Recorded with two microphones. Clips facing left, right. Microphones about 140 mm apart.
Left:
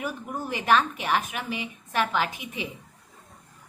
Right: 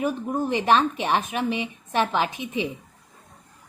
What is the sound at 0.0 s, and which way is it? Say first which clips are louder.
Speech: right 7 dB; 25° right (ahead or behind).